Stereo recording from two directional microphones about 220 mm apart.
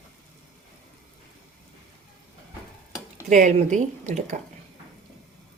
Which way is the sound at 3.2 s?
35° right (ahead or behind).